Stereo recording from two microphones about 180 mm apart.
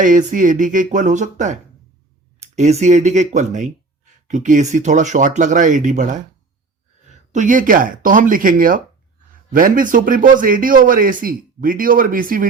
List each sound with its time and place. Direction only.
0.0 s speech: 45° right (ahead or behind)